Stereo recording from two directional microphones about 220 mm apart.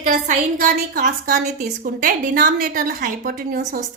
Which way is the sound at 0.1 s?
35° right (ahead or behind).